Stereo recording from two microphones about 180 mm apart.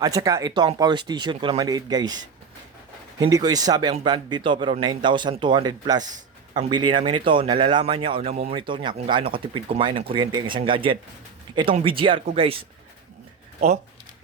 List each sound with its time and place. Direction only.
0.0 s speech: 20° right (ahead or behind)
3.2 s speech: 20° right (ahead or behind)